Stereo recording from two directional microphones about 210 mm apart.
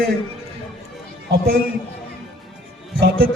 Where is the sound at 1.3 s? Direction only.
45° right (ahead or behind).